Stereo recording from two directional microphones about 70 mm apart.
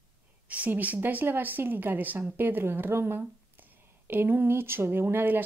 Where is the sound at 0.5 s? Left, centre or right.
Right.